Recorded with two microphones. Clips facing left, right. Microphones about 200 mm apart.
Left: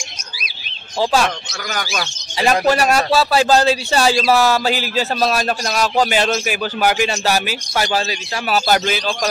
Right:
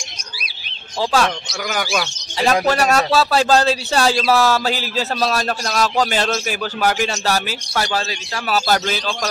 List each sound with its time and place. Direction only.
2.3 s a man's voice: 10° left (ahead or behind)
5.2 s a man's voice: 10° left (ahead or behind)
7.9 s a man's voice: 20° left (ahead or behind)